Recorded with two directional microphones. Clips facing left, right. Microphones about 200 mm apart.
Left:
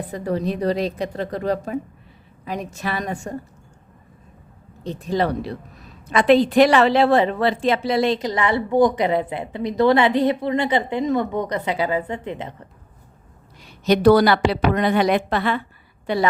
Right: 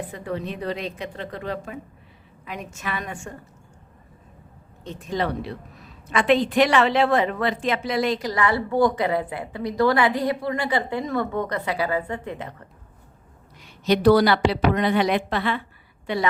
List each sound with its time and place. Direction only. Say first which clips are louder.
0.1 s a woman's voice: left 6 dB; 40° left (ahead or behind)
4.8 s a woman's voice: left 5 dB; 35° left (ahead or behind)
13.6 s a woman's voice: left 3 dB; 40° left (ahead or behind)
16.1 s a woman's voice: left 4 dB; 35° left (ahead or behind)